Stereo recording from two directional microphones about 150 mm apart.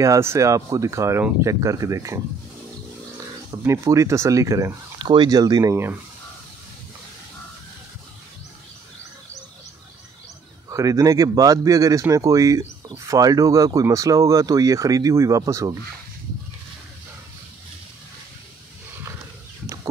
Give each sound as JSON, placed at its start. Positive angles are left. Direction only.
{"t": 0.0, "sound": "speech", "side_deg": -20}
{"t": 3.6, "sound": "speech", "side_deg": -20}
{"t": 10.7, "sound": "speech", "side_deg": -20}